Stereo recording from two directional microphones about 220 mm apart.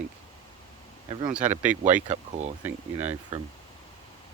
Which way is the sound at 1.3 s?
5° right (ahead or behind).